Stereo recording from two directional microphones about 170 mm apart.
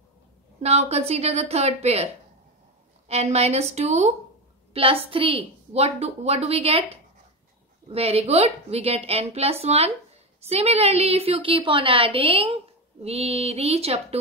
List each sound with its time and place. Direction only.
0.6 s a woman's voice: 40° right (ahead or behind)
3.1 s a woman's voice: 40° right (ahead or behind)